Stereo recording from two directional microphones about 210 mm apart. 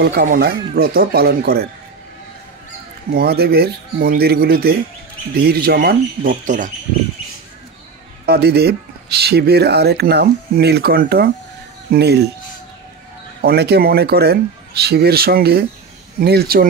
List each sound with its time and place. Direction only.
0.0 s speech: 50° right (ahead or behind)
3.1 s speech: 50° right (ahead or behind)
8.3 s speech: 50° right (ahead or behind)
13.4 s speech: 50° right (ahead or behind)